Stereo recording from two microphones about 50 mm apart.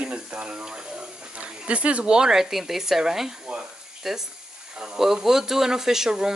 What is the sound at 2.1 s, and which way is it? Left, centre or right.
Speech, centre.